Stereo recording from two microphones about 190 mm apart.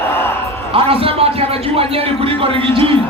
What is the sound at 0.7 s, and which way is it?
A man's voice, 30° right (ahead or behind).